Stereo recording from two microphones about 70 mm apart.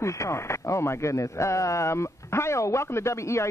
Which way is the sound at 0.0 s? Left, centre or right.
Left.